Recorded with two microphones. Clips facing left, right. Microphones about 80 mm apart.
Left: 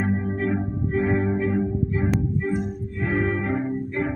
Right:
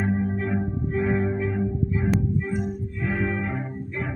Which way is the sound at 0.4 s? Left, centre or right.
Left.